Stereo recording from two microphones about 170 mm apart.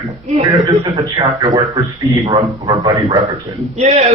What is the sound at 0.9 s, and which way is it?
A man's voice, 25° right (ahead or behind).